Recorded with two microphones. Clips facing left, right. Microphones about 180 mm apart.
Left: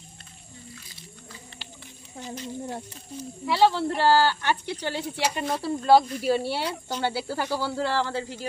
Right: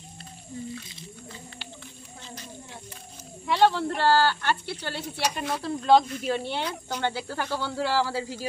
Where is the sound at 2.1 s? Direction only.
20° left (ahead or behind).